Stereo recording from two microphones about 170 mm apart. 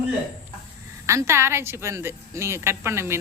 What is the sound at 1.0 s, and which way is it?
A woman's voice, 15° right (ahead or behind).